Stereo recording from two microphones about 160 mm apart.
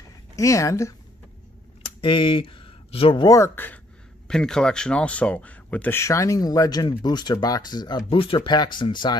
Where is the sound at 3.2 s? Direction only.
20° left (ahead or behind).